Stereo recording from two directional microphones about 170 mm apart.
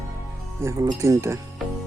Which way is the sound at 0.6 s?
15° right (ahead or behind).